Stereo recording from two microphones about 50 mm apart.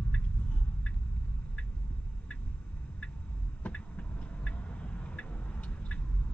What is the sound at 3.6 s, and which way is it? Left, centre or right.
Vehicle, left.